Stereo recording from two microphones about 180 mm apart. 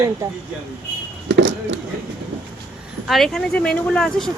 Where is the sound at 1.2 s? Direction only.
90° right.